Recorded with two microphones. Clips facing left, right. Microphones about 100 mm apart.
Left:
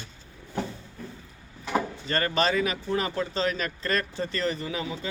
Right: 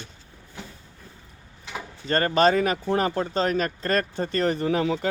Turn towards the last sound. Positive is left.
turn(degrees=-65)  # may be behind; listen again after turning